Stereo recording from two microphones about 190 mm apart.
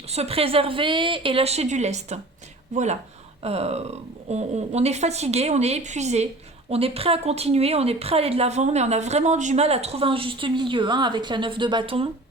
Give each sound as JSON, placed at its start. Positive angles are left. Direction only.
{"t": 0.1, "sound": "speech", "side_deg": -30}